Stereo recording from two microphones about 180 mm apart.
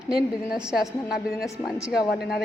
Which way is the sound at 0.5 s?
5° right (ahead or behind).